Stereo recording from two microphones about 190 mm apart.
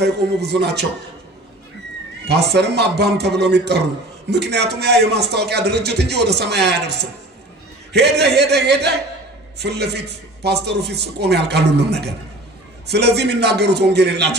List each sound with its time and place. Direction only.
0.0 s a man's voice: 60° right (ahead or behind)
2.2 s a man's voice: 60° right (ahead or behind)